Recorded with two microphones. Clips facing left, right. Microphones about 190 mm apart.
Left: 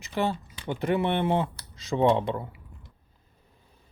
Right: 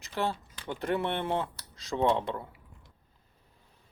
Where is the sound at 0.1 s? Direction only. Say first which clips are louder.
Left 4 dB; 20° left (ahead or behind).